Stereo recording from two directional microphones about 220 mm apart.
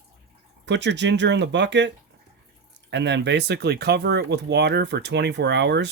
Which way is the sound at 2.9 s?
55° right (ahead or behind).